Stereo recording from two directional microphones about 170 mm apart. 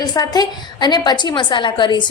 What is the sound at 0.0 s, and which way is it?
A woman's voice, 25° left (ahead or behind).